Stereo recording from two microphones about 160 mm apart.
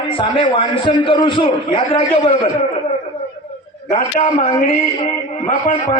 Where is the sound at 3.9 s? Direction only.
50° left (ahead or behind).